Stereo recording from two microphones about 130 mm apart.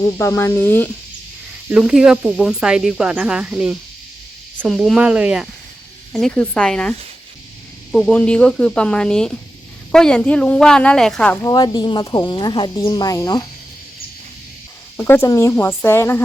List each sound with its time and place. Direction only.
0.0 s speech: 20° left (ahead or behind)
1.7 s speech: 5° right (ahead or behind)
6.1 s speech: 5° left (ahead or behind)
7.9 s speech: 5° left (ahead or behind)
11.4 s speech: 30° left (ahead or behind)
14.9 s speech: 15° left (ahead or behind)